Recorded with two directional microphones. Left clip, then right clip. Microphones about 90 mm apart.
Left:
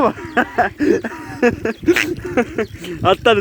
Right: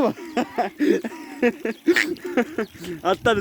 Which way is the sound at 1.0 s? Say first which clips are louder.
Left 6 dB; 15° right (ahead or behind).